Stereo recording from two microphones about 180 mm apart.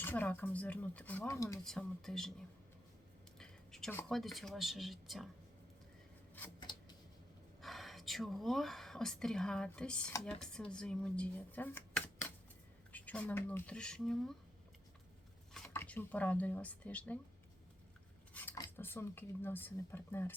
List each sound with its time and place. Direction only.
0.0 s speech: 10° left (ahead or behind)
1.6 s speech: centre (ahead or behind)
3.3 s a sound: centre (ahead or behind)
4.1 s speech: centre (ahead or behind)
6.6 s a sound: 20° left (ahead or behind)
7.6 s speech: centre (ahead or behind)
15.7 s speech: 10° left (ahead or behind)
18.5 s speech: 10° left (ahead or behind)